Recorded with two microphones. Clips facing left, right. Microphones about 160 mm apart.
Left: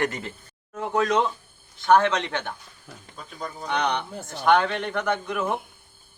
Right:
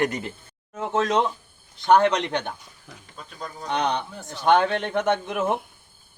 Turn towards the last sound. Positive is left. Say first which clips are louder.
# right 3 dB
turn(degrees=-20)  # may be behind; listen again after turning